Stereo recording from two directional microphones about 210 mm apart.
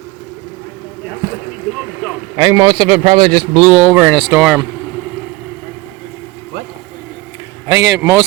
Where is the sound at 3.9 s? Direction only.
5° right (ahead or behind).